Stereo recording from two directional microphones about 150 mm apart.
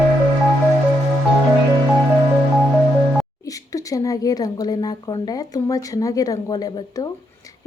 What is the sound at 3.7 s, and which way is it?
A woman's voice, 25° left (ahead or behind).